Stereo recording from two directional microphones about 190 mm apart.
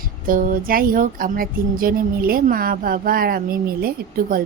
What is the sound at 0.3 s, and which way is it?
Speech, 45° right (ahead or behind).